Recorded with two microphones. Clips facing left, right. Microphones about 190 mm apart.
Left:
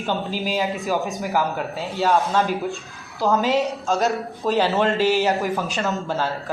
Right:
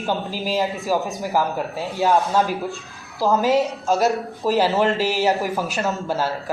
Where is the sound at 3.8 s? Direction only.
Centre (ahead or behind).